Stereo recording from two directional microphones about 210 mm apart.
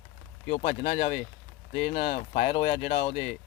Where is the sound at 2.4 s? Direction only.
25° left (ahead or behind).